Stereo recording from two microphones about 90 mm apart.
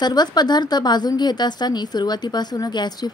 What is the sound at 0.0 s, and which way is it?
Speech, 50° left (ahead or behind).